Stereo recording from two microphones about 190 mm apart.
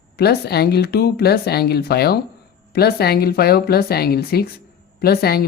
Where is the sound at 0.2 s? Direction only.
55° left (ahead or behind).